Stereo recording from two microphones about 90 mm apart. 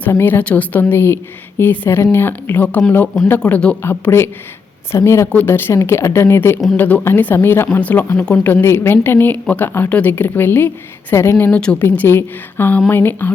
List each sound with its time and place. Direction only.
0.1 s a woman's voice: 25° left (ahead or behind)
3.8 s a woman's voice: 25° left (ahead or behind)
5.3 s a woman's voice: 20° left (ahead or behind)
11.5 s speech: 15° left (ahead or behind)
11.8 s a woman's voice: 25° left (ahead or behind)